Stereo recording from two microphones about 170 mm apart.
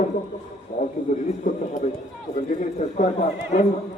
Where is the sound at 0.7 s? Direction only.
45° left (ahead or behind).